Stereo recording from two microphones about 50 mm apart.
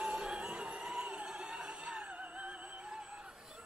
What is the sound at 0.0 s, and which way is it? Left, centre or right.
Music, centre.